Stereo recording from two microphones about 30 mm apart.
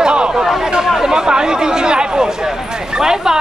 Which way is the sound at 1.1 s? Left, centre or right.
Right.